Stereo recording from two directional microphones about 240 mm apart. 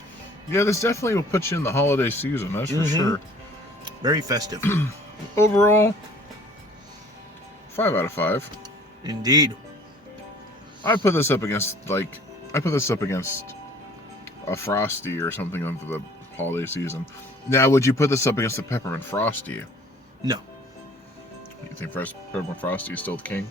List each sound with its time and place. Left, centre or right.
0.5 s speech: centre
3.8 s speech: centre
4.6 s speech: centre
7.8 s speech: centre
9.0 s speech: centre
11.0 s speech: centre
21.8 s speech: centre